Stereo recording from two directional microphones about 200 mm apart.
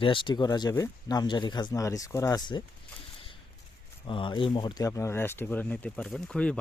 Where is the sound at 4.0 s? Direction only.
25° left (ahead or behind).